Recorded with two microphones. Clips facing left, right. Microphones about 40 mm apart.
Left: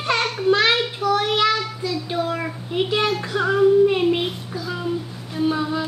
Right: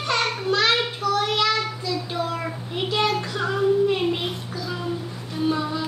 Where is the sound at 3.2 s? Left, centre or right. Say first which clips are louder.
Left 5 dB; centre.